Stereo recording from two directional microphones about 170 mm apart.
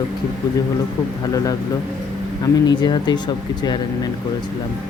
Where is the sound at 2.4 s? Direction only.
25° left (ahead or behind).